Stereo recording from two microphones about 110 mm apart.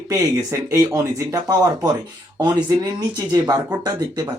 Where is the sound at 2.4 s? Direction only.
40° right (ahead or behind).